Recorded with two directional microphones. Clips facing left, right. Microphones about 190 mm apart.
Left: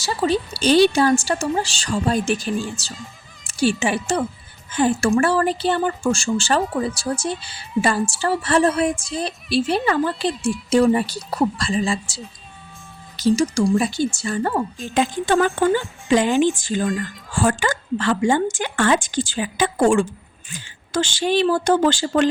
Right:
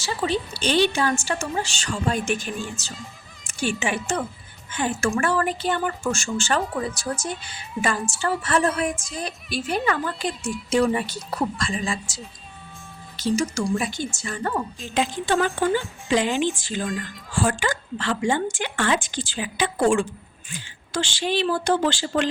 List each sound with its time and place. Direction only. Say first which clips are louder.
0.0 s music: left 4 dB; 40° left (ahead or behind)
3.4 s a child's voice: left 6 dB; 35° left (ahead or behind)
4.7 s music: left 6 dB; 35° left (ahead or behind)
14.9 s a woman's voice: left 4 dB; 50° left (ahead or behind)